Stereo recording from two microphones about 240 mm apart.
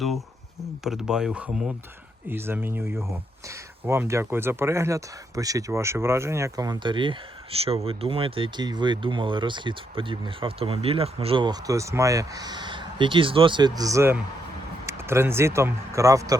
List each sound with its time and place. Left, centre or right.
0.9 s speech: centre